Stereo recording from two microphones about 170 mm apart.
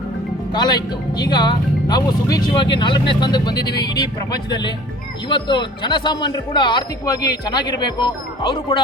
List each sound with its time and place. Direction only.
0.5 s speech: 25° left (ahead or behind)